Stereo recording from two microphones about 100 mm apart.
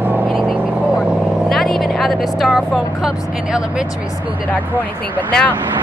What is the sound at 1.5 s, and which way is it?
Vehicle, centre (ahead or behind).